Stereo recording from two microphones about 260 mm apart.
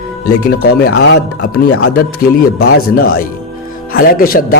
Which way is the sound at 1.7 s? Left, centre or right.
Left.